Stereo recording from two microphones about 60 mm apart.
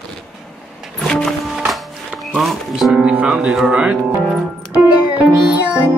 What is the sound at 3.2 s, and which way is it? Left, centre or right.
Speech, centre.